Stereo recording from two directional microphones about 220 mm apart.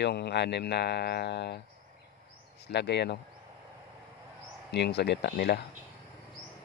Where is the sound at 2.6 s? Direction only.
50° left (ahead or behind).